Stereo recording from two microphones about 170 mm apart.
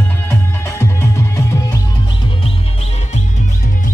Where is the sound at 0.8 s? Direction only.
15° left (ahead or behind).